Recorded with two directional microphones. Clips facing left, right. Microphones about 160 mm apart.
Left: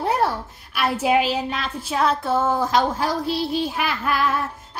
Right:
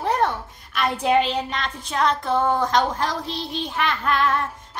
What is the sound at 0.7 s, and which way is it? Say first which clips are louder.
Child singing: even; 5° left (ahead or behind).